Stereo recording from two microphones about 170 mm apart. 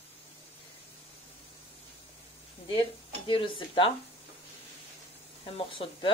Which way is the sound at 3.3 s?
30° left (ahead or behind).